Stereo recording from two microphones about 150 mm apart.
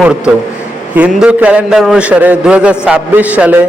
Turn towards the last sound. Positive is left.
turn(degrees=-10)  # may be behind; listen again after turning